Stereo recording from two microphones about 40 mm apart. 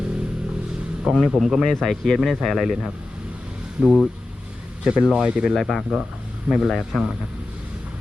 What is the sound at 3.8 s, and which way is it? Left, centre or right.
Speech, right.